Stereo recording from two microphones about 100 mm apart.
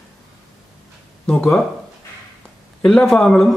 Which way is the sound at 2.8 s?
5° left (ahead or behind).